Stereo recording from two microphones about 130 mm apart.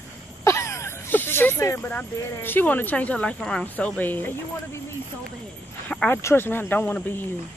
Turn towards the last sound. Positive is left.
turn(degrees=15)  # may be behind; listen again after turning